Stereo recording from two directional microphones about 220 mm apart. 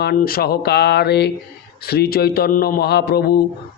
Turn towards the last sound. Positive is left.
turn(degrees=45)  # may be behind; listen again after turning